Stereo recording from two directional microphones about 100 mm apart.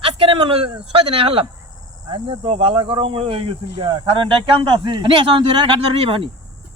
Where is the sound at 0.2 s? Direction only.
60° right (ahead or behind).